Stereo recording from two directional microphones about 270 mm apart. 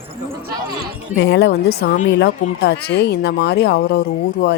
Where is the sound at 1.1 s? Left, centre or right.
Left.